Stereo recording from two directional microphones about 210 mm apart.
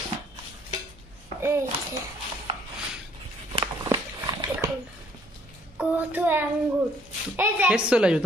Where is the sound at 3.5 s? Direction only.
20° right (ahead or behind).